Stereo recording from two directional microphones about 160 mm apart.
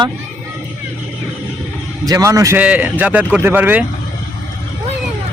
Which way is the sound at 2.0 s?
20° right (ahead or behind).